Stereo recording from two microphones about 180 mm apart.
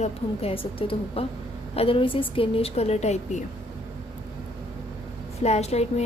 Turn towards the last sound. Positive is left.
turn(degrees=35)  # may be behind; listen again after turning